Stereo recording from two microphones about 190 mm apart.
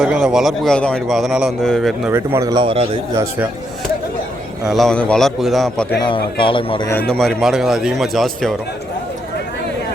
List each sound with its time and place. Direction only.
0.0 s a man's voice: 5° right (ahead or behind)
2.0 s speech: 10° right (ahead or behind); by 3.0 s 30° right (ahead or behind)
4.6 s a man's voice: centre (ahead or behind)
6.1 s speech: 25° left (ahead or behind)
6.9 s a man's voice: 5° left (ahead or behind)